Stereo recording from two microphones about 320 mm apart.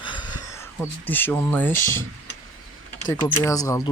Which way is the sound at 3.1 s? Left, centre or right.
Centre.